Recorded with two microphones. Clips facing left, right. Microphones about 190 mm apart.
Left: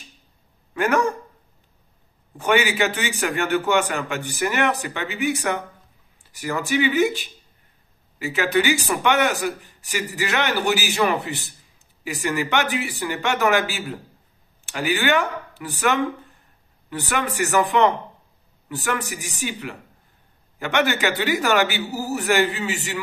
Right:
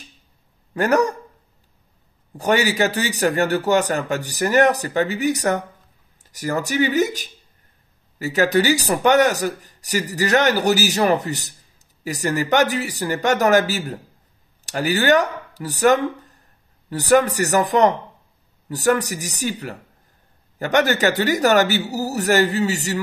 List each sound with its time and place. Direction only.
0.7 s a man's voice: 40° right (ahead or behind)
2.3 s a man's voice: 40° right (ahead or behind)